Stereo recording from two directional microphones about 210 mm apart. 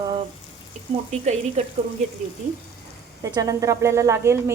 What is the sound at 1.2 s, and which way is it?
Stir, 35° right (ahead or behind).